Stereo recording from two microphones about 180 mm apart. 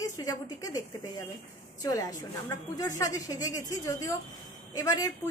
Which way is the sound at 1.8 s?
20° left (ahead or behind).